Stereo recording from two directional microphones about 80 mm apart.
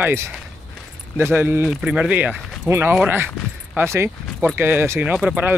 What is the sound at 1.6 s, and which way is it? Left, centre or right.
Speech, centre.